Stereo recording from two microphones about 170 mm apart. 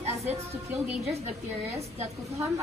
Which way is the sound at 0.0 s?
40° right (ahead or behind).